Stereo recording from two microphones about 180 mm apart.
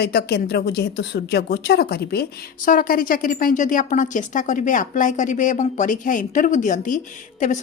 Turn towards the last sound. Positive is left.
turn(degrees=45)  # may be behind; listen again after turning